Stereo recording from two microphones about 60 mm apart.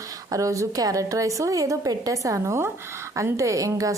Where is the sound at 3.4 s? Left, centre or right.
Right.